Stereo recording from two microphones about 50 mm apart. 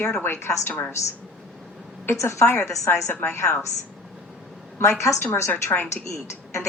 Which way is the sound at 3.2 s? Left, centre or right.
Left.